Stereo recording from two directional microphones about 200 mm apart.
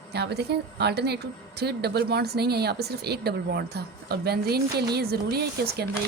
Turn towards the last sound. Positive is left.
turn(degrees=-50)  # may be behind; listen again after turning